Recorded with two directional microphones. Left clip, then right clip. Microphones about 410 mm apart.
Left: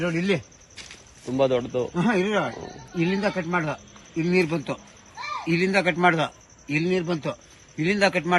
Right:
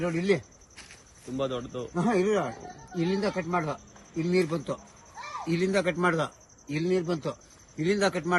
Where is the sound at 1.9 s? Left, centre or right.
Centre.